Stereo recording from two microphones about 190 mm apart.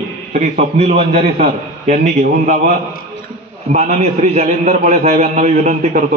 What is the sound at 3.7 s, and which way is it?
A man's voice, 35° right (ahead or behind).